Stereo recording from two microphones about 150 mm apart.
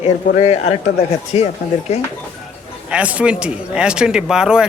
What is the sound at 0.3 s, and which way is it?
Speech, 45° left (ahead or behind).